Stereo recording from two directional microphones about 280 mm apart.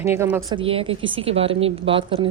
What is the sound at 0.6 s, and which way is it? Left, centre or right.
A woman's voice, centre.